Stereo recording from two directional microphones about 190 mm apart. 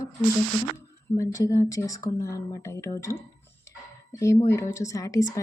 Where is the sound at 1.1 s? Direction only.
15° left (ahead or behind).